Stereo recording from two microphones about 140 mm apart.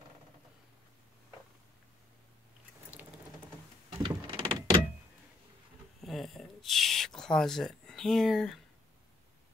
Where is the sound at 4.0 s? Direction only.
35° right (ahead or behind).